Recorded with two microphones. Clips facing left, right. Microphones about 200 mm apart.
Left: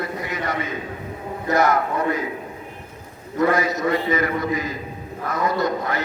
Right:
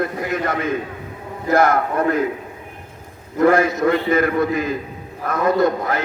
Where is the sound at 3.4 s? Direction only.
50° right (ahead or behind).